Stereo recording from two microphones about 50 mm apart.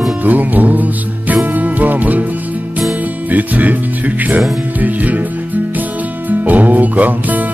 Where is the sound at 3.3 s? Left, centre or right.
Right.